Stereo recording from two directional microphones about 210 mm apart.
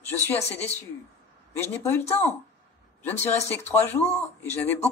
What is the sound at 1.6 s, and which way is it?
Speech, 10° left (ahead or behind).